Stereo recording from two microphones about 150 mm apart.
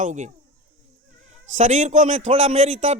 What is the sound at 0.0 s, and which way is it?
A man's voice, 55° right (ahead or behind).